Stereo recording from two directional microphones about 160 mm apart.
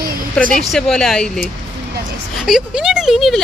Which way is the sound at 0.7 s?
5° left (ahead or behind).